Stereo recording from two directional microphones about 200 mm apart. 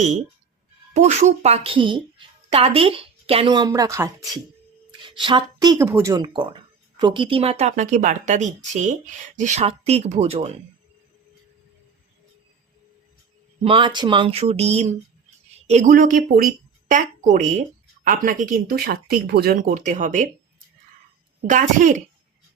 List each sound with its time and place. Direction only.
0.9 s speech: 35° right (ahead or behind)
13.6 s a woman's voice: 25° right (ahead or behind)
21.4 s speech: 40° right (ahead or behind)